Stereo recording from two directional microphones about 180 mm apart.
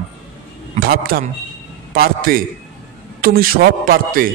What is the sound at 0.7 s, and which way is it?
Speech, 55° right (ahead or behind).